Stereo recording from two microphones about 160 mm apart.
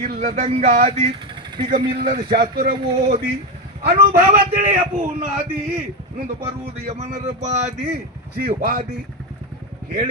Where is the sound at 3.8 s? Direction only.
70° right (ahead or behind).